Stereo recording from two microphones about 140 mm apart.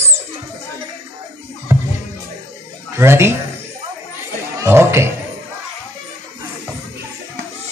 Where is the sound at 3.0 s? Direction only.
20° right (ahead or behind).